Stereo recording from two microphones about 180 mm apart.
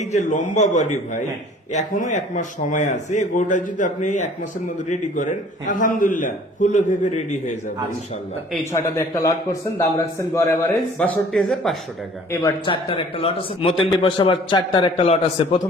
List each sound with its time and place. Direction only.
0.0 s a man's voice: 40° left (ahead or behind)
8.7 s a man's voice: 15° left (ahead or behind); by 11.8 s centre (ahead or behind)
12.3 s a man's voice: 20° left (ahead or behind)